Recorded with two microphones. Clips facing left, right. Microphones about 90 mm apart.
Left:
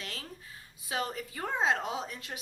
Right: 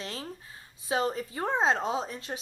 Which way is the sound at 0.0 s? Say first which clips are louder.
Right 5 dB; 30° right (ahead or behind).